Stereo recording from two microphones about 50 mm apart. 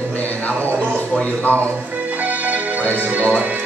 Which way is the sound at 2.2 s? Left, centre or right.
Right.